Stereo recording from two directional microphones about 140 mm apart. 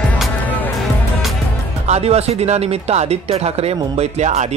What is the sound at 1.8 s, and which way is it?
Speech, 50° right (ahead or behind).